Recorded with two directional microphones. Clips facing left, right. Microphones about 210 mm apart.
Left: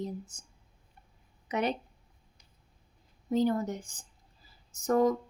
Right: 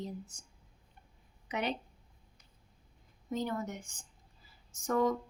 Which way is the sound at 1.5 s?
45° left (ahead or behind).